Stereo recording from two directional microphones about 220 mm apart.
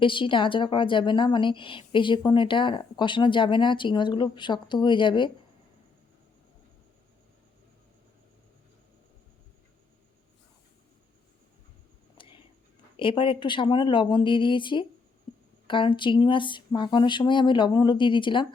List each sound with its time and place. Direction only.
0.0 s a woman's voice: 20° left (ahead or behind)
12.1 s whispering: 25° left (ahead or behind)
13.0 s a woman's voice: 25° left (ahead or behind)